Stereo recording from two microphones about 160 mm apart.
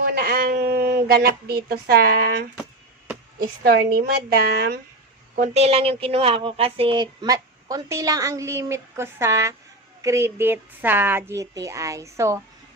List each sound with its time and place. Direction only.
0.0 s speech: 70° right (ahead or behind)
3.6 s a woman's voice: 75° right (ahead or behind)
5.4 s speech: 40° right (ahead or behind); by 12.4 s 20° right (ahead or behind)